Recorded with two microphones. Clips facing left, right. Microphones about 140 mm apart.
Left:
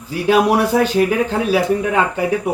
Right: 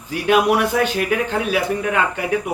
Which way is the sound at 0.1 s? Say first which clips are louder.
Left 2 dB; 35° left (ahead or behind).